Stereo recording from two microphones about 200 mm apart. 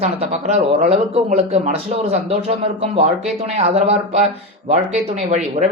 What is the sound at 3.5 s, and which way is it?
Speech, 30° right (ahead or behind).